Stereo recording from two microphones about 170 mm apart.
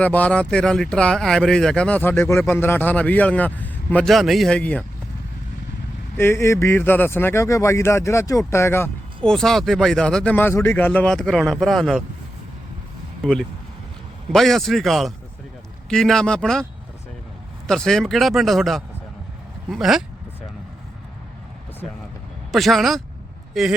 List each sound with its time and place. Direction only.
0.0 s speech: 10° left (ahead or behind)
6.1 s speech: 15° left (ahead or behind)
9.3 s speech: centre (ahead or behind)
14.3 s speech: centre (ahead or behind)
17.7 s speech: 5° left (ahead or behind)
22.5 s speech: centre (ahead or behind)